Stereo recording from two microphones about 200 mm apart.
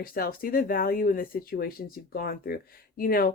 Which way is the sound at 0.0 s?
45° left (ahead or behind).